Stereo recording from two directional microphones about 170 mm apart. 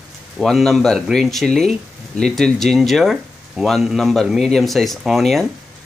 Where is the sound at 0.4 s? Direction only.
Centre (ahead or behind).